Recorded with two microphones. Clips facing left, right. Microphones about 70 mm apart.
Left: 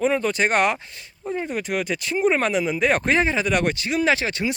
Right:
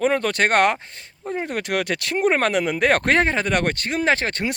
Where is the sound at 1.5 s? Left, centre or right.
Right.